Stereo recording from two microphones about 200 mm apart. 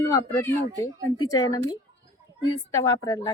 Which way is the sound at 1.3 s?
20° left (ahead or behind).